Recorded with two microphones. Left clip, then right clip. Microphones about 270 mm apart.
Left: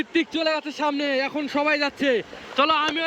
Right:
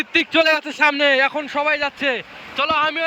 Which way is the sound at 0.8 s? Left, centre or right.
Right.